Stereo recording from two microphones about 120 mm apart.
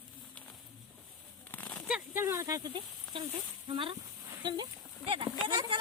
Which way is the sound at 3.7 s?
45° right (ahead or behind).